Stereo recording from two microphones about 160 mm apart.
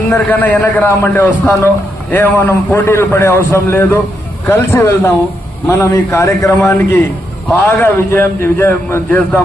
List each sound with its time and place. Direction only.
0.1 s a man's voice: 10° left (ahead or behind)